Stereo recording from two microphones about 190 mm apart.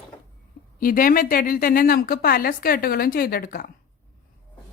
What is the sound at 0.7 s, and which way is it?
Speech, 45° left (ahead or behind).